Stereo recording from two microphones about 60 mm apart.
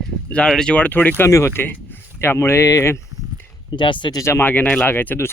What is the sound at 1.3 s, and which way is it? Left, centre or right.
Speech, left.